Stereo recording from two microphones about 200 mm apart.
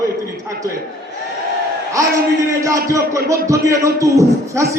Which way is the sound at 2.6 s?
15° right (ahead or behind).